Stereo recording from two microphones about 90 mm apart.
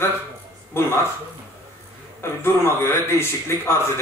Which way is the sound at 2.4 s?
30° left (ahead or behind).